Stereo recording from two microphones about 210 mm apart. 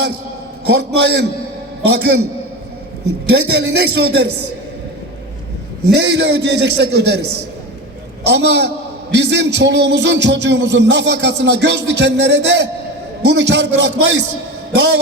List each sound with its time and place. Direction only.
0.7 s a man's voice: 55° right (ahead or behind)
3.5 s a man's voice: 55° right (ahead or behind)
5.9 s a man's voice: 55° right (ahead or behind)
8.3 s music: 55° right (ahead or behind)
14.7 s a man's voice: 55° right (ahead or behind)